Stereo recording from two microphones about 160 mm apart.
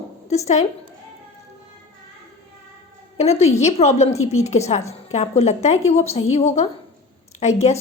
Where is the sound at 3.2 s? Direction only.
40° left (ahead or behind).